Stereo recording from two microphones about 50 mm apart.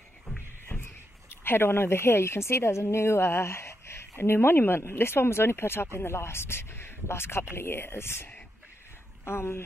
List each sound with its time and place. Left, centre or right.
0.7 s a sound: left
1.4 s a woman's voice: left
4.2 s speech: left